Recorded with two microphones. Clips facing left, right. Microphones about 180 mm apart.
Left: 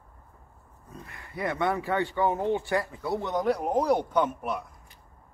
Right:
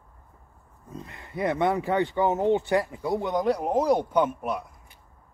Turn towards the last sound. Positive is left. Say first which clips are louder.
# right 2 dB
turn(degrees=-10)  # may be behind; listen again after turning